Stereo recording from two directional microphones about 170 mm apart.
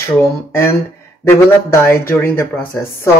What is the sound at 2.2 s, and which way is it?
Speech, 15° left (ahead or behind).